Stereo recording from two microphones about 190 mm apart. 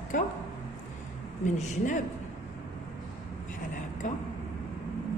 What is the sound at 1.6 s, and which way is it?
Speech, 40° left (ahead or behind).